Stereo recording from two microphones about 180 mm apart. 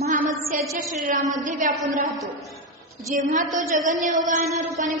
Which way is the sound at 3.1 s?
45° right (ahead or behind).